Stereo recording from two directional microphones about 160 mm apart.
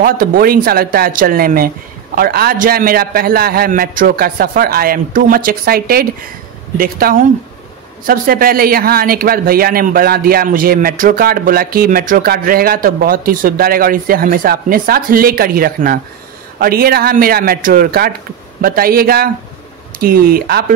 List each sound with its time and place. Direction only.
0.0 s a man's voice: 65° right (ahead or behind)